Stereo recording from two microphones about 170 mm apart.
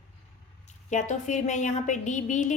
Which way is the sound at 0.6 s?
45° left (ahead or behind).